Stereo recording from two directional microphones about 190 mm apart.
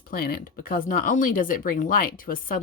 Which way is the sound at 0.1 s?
50° left (ahead or behind).